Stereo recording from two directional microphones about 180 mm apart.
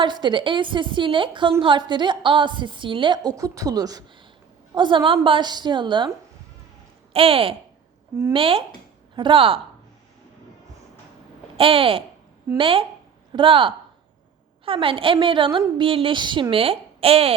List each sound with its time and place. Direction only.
0.0 s a woman's voice: 25° right (ahead or behind)
11.5 s a woman's voice: 30° right (ahead or behind)